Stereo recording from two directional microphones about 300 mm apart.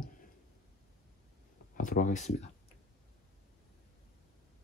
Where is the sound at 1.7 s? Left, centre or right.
Left.